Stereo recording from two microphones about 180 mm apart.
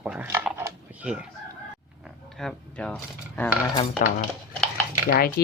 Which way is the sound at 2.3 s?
5° left (ahead or behind).